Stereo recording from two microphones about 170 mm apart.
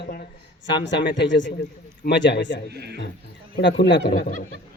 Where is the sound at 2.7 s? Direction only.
75° right (ahead or behind).